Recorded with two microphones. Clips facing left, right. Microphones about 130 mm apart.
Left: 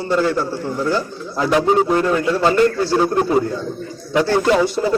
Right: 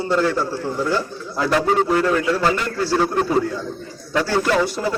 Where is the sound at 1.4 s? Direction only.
20° left (ahead or behind).